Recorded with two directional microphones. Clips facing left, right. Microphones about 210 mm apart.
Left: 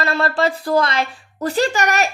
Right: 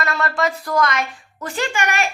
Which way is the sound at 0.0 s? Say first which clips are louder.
Left 3 dB; 30° left (ahead or behind).